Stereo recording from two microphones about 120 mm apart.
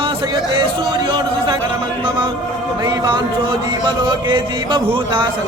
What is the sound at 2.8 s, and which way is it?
Speech, 40° right (ahead or behind).